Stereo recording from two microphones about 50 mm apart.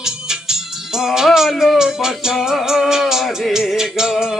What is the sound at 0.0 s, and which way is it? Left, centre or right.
Music, centre.